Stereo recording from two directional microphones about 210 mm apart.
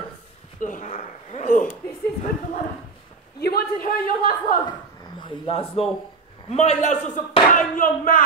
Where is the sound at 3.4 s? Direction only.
50° left (ahead or behind).